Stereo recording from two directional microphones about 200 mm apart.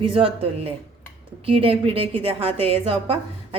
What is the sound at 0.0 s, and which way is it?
A woman's voice, 25° right (ahead or behind).